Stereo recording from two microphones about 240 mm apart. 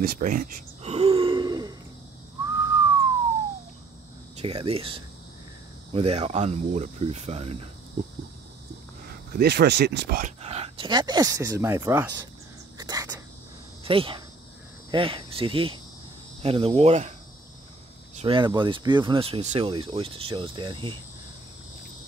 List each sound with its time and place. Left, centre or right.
0.0 s throat clearing: right; by 1.8 s centre
2.4 s whistling: centre
4.4 s speech: right
9.3 s speech: right
10.4 s speech: right; by 12.2 s centre
12.7 s cricket: centre
13.8 s speech: right
14.9 s cricket: right
16.4 s speech: right
18.1 s speech: right